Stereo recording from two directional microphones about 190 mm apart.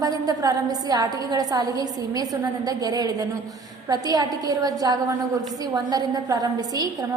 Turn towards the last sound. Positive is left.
turn(degrees=-20)  # may be behind; listen again after turning